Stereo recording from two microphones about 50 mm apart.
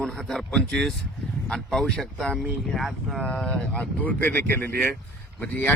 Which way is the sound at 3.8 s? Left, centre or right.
Left.